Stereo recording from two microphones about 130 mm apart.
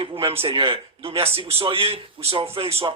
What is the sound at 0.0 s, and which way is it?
A man's voice, 45° right (ahead or behind).